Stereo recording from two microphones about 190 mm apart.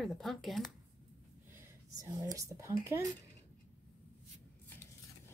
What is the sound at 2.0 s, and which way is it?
Speech, 15° right (ahead or behind).